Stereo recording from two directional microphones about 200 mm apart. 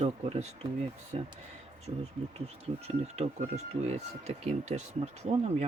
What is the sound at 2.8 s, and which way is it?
Speech, 35° right (ahead or behind).